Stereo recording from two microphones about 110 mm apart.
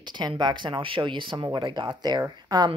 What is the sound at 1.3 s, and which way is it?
Speech, 35° right (ahead or behind).